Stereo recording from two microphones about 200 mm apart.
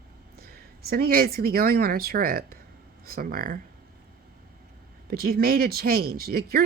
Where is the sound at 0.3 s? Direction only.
50° right (ahead or behind).